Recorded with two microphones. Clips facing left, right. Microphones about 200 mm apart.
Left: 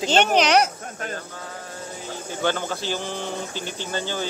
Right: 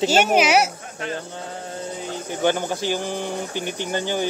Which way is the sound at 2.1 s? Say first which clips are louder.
Right 3 dB; 15° right (ahead or behind).